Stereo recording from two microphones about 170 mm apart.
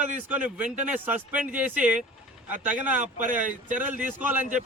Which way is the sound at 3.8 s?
10° right (ahead or behind).